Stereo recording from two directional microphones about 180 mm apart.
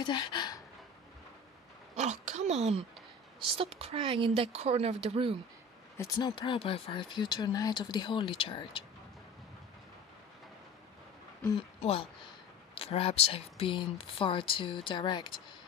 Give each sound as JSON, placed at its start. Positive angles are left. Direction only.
{"t": 0.0, "sound": "speech", "side_deg": 25}
{"t": 2.0, "sound": "speech", "side_deg": -40}
{"t": 5.9, "sound": "speech", "side_deg": 25}
{"t": 11.8, "sound": "speech", "side_deg": 30}